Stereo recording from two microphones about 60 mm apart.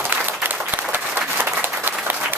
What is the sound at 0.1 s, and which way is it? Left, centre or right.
Applause, right.